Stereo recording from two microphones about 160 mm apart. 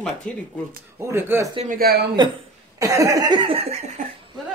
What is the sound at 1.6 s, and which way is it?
Speech, 60° right (ahead or behind).